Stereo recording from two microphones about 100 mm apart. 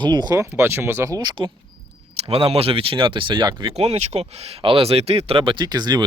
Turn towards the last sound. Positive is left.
turn(degrees=-45)  # may be behind; listen again after turning